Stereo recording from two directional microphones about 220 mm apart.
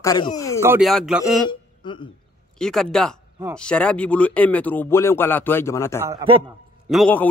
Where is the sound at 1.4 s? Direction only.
20° left (ahead or behind).